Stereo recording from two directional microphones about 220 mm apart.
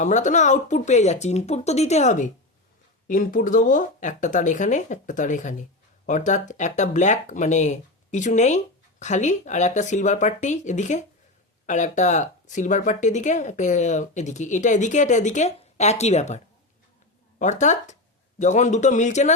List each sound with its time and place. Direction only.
0.0 s speech: 35° left (ahead or behind)
17.4 s speech: 35° left (ahead or behind)